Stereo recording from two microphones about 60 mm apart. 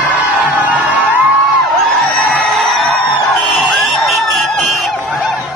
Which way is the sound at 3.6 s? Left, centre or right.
Centre.